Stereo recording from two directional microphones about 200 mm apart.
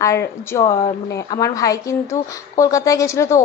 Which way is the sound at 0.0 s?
15° left (ahead or behind).